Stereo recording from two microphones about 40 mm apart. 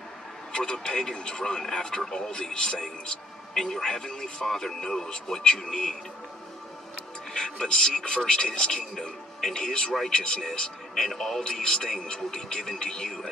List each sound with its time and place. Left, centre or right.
0.5 s a man's voice: left
7.6 s speech: left
11.1 s a man's voice: centre
11.4 s speech: left